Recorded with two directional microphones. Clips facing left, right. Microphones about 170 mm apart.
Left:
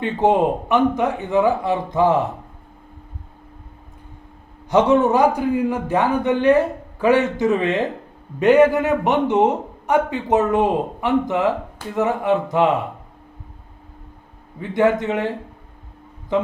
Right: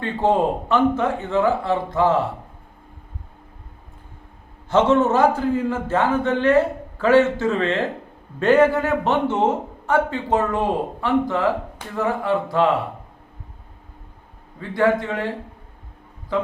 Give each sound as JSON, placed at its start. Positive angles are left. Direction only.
{"t": 0.0, "sound": "a man's voice", "side_deg": 20}
{"t": 4.7, "sound": "a man's voice", "side_deg": 15}
{"t": 14.6, "sound": "speech", "side_deg": 20}
{"t": 16.3, "sound": "speech", "side_deg": 20}